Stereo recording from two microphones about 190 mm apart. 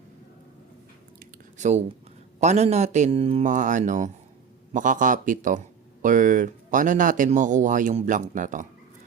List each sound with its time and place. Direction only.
1.2 s chewing: 40° right (ahead or behind)
2.4 s speech: 35° right (ahead or behind)